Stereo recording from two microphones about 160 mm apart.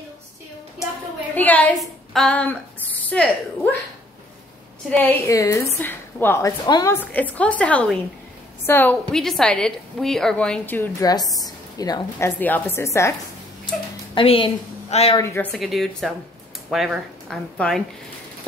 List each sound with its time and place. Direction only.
1.3 s speech: 10° left (ahead or behind)
4.9 s a woman's voice: 10° left (ahead or behind)
6.6 s a woman's voice: 25° left (ahead or behind)
6.9 s a woman's voice: 10° left (ahead or behind)
11.3 s a woman's voice: 25° left (ahead or behind)
12.4 s a woman's voice: 10° left (ahead or behind)
14.1 s a woman's voice: 35° left (ahead or behind)
15.1 s a woman's voice: 15° left (ahead or behind)
15.5 s a woman's voice: centre (ahead or behind)